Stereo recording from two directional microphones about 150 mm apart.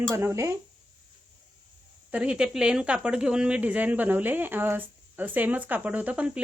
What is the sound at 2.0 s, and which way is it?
Speech, 10° right (ahead or behind).